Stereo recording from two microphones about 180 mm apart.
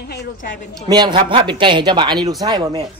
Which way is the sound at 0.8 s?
25° right (ahead or behind).